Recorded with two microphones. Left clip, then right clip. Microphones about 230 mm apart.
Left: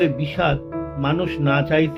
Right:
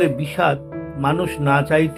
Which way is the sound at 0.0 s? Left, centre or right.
Right.